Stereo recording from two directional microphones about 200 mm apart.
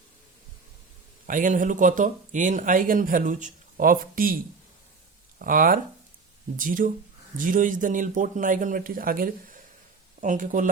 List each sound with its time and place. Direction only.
1.3 s speech: 40° right (ahead or behind)
5.4 s speech: 45° right (ahead or behind)